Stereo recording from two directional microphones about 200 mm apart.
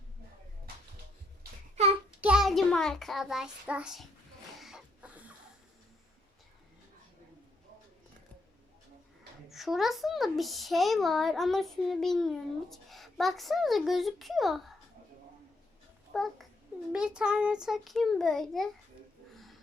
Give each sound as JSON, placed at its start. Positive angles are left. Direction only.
{"t": 2.2, "sound": "a child's voice", "side_deg": -5}
{"t": 4.5, "sound": "chicken", "side_deg": 0}
{"t": 9.5, "sound": "a child's voice", "side_deg": 0}
{"t": 16.1, "sound": "a child's voice", "side_deg": 0}
{"t": 19.3, "sound": "a sound", "side_deg": 0}